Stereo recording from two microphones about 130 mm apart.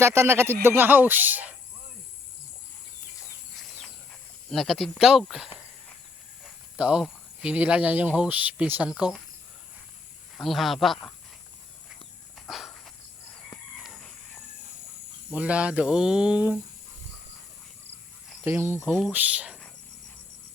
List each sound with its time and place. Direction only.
0.0 s speech: 20° right (ahead or behind)
4.5 s speech: centre (ahead or behind)
6.7 s speech: 10° right (ahead or behind)
10.3 s speech: centre (ahead or behind)
12.5 s walk: centre (ahead or behind)
15.3 s speech: 10° right (ahead or behind)
18.4 s speech: 20° right (ahead or behind)